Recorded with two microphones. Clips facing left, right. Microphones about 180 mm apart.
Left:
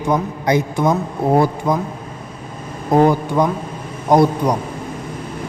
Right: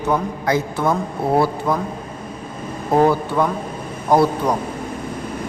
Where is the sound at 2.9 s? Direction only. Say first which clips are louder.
Left 2 dB; 15° left (ahead or behind).